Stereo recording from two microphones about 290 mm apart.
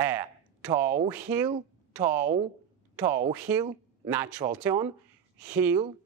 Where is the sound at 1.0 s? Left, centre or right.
Centre.